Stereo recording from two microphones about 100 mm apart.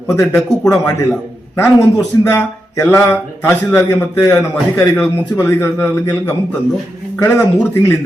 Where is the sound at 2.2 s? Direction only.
25° left (ahead or behind).